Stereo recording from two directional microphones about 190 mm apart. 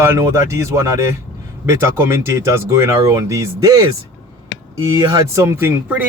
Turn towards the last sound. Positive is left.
turn(degrees=-10)  # may be behind; listen again after turning